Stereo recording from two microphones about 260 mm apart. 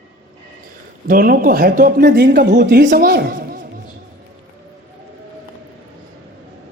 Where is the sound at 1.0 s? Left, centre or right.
Right.